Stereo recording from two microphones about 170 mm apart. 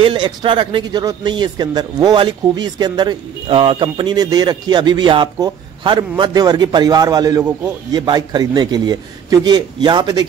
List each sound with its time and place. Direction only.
0.0 s a man's voice: 30° right (ahead or behind)